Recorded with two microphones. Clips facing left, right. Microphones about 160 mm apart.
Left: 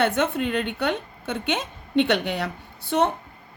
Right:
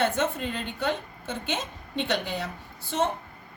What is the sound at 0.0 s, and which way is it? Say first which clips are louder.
A woman's voice: left 4 dB; 65° left (ahead or behind).